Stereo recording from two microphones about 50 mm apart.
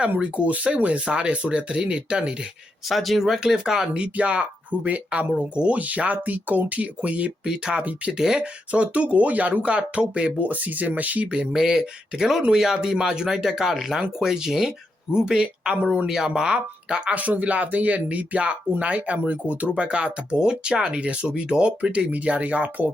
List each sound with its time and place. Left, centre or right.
0.2 s speech: right
2.9 s speech: centre
3.4 s speech: centre
4.0 s speech: right
7.3 s speech: centre
7.8 s speech: right
8.2 s speech: centre
8.7 s speech: right
11.5 s speech: centre
16.0 s speech: centre; by 22.9 s right